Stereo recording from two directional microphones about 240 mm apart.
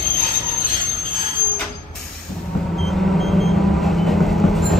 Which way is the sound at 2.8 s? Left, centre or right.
Centre.